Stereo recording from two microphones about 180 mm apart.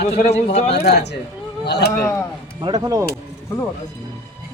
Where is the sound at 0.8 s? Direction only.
65° left (ahead or behind).